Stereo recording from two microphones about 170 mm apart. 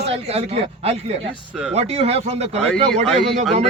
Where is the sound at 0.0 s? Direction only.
35° right (ahead or behind).